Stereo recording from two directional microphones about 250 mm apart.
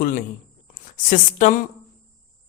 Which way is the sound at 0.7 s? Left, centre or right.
Left.